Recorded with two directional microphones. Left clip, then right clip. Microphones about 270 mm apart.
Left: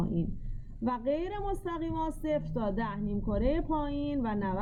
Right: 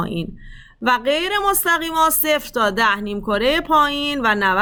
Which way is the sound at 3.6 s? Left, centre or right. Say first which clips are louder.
Right 17 dB; right.